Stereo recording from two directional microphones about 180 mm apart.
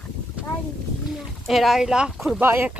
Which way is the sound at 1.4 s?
Centre (ahead or behind).